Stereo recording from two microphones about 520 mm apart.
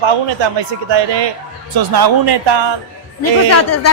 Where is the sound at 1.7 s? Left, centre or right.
Right.